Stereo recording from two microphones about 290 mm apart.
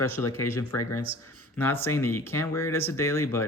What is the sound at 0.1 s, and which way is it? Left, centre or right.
Speech, centre.